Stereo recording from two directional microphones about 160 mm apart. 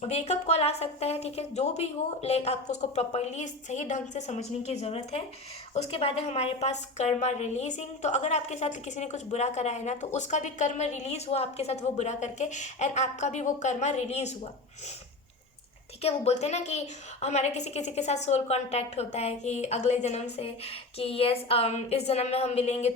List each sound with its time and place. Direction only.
0.0 s a woman's voice: 40° left (ahead or behind)
16.0 s a woman's voice: 40° left (ahead or behind)